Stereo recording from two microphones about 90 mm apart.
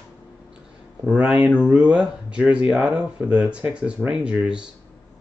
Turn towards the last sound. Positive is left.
turn(degrees=-10)  # may be behind; listen again after turning